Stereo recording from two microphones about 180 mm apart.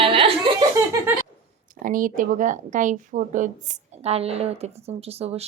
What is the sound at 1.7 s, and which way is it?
Speech, 50° right (ahead or behind).